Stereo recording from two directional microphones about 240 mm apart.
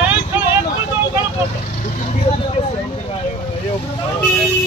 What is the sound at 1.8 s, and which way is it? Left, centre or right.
Vehicle, left.